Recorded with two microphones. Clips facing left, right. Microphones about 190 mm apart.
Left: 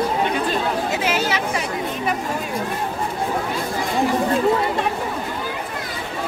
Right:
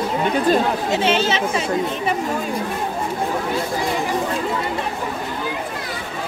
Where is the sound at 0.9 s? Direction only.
30° right (ahead or behind).